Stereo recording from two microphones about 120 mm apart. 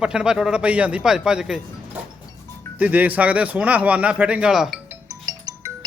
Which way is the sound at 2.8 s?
15° right (ahead or behind).